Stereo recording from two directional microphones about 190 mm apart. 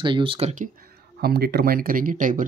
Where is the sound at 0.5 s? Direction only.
45° right (ahead or behind).